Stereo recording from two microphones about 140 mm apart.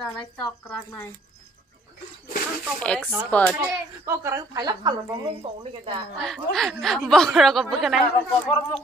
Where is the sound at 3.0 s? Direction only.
10° right (ahead or behind).